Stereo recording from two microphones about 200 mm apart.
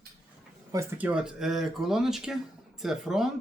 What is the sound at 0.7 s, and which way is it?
A man's voice, 10° right (ahead or behind).